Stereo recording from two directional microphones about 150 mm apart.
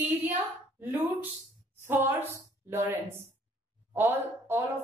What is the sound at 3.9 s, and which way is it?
Speech, 15° right (ahead or behind).